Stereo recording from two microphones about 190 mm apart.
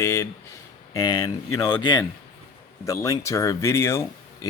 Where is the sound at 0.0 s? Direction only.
15° left (ahead or behind).